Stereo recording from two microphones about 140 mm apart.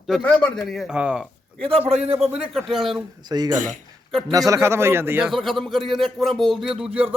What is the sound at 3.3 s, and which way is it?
A man's voice, 30° right (ahead or behind).